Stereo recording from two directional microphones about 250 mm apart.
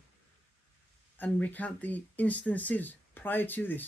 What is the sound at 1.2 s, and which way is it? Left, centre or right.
Speech, centre.